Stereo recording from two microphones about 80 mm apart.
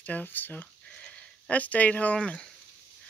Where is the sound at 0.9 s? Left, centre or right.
Centre.